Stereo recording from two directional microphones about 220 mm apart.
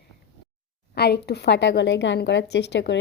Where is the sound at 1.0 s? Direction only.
50° left (ahead or behind).